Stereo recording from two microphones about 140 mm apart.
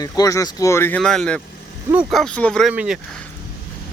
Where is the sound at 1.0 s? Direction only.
5° left (ahead or behind).